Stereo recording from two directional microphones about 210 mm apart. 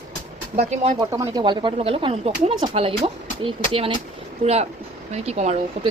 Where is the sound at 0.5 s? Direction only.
30° right (ahead or behind).